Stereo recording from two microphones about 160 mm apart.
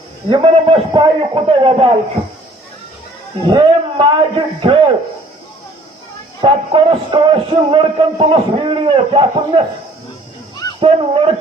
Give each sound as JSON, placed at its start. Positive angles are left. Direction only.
{"t": 0.3, "sound": "music", "side_deg": -30}
{"t": 3.4, "sound": "music", "side_deg": -30}
{"t": 6.4, "sound": "music", "side_deg": -35}
{"t": 10.8, "sound": "speech", "side_deg": -35}